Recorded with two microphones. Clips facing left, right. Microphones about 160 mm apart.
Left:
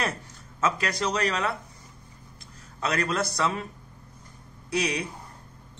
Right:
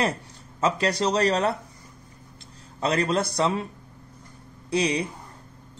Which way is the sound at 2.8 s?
30° right (ahead or behind).